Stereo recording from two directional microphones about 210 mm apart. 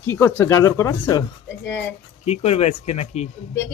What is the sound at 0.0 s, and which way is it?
A woman's voice, 10° left (ahead or behind).